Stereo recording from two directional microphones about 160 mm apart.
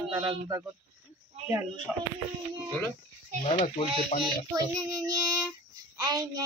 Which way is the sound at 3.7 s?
35° left (ahead or behind).